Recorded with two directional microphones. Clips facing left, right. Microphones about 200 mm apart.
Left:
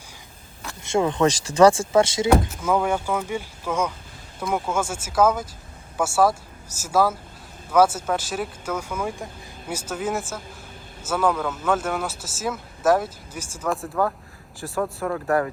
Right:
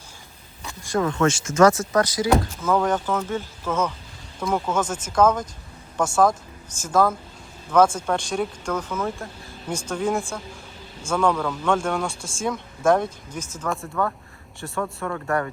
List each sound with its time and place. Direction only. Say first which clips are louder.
0.8 s speech: left 1 dB; 25° left (ahead or behind)
2.6 s speech: right 1 dB; 10° left (ahead or behind)
14.9 s speech: left 3 dB; 5° left (ahead or behind)